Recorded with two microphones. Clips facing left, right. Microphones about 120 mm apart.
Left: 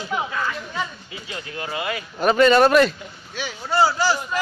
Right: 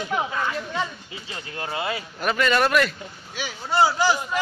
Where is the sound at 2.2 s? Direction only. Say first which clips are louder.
Left 7 dB; 30° left (ahead or behind).